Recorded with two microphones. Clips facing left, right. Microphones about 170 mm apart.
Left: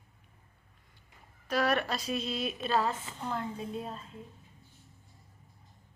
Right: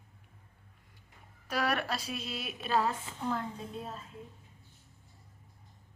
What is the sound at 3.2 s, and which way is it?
Speech, 5° left (ahead or behind).